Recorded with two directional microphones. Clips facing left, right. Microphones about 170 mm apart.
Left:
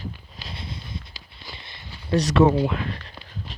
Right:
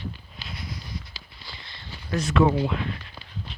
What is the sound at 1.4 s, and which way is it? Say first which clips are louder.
Walk: left 3 dB; 20° left (ahead or behind).